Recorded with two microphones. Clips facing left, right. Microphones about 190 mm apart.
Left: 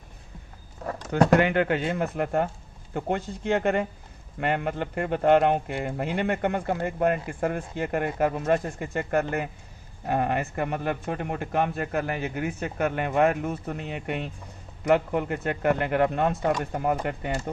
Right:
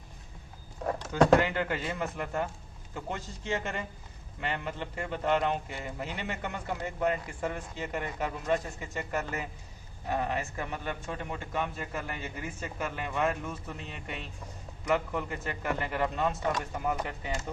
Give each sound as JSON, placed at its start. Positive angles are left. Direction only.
{"t": 1.1, "sound": "a man's voice", "side_deg": 65}